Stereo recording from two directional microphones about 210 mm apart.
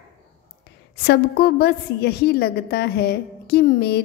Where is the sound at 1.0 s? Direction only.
50° left (ahead or behind).